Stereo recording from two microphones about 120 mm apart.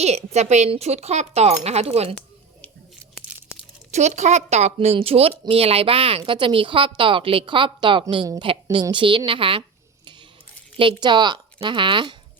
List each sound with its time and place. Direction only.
0.0 s speech: 65° right (ahead or behind)
3.9 s a woman's voice: 70° right (ahead or behind); by 9.6 s 50° right (ahead or behind)
10.8 s speech: 40° right (ahead or behind)